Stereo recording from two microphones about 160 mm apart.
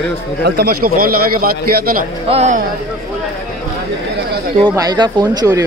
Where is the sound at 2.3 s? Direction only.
45° right (ahead or behind).